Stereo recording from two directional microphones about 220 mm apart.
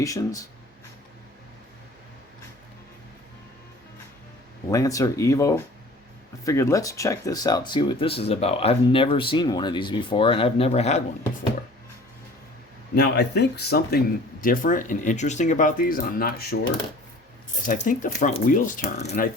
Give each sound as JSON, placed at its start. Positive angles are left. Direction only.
{"t": 0.0, "sound": "speech", "side_deg": 15}
{"t": 4.7, "sound": "speech", "side_deg": 15}
{"t": 12.9, "sound": "speech", "side_deg": 45}
{"t": 17.8, "sound": "speech", "side_deg": 35}